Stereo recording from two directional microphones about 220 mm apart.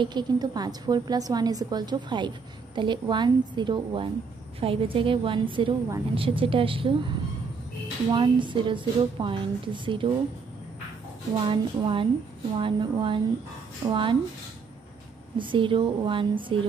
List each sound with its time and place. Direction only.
0.0 s a woman's voice: 20° right (ahead or behind)
8.1 s a woman's voice: 20° right (ahead or behind)
11.4 s a woman's voice: 25° right (ahead or behind)
15.3 s a woman's voice: 20° right (ahead or behind)